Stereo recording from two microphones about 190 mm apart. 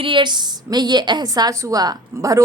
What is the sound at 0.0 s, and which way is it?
A woman's voice, 25° right (ahead or behind).